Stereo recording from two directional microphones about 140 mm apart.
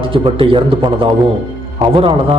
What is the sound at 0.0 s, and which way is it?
A man's voice, 40° right (ahead or behind).